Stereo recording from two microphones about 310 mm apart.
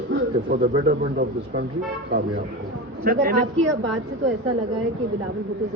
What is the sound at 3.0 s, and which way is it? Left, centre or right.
Speech, right.